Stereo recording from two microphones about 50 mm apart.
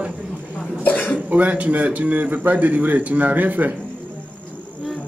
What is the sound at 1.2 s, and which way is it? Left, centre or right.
Speech, right.